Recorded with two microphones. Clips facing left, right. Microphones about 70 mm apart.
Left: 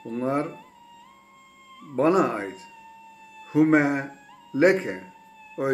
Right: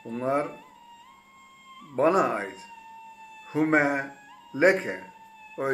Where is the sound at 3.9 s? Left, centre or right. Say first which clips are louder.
Left 1 dB; centre.